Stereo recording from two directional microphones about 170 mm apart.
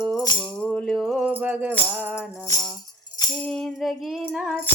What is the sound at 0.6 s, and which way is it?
Mantra, 5° left (ahead or behind).